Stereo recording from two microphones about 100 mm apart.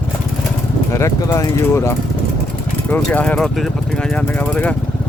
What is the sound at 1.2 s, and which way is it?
Speech, 35° left (ahead or behind).